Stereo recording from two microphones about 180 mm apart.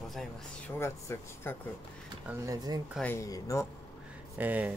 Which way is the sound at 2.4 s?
20° right (ahead or behind).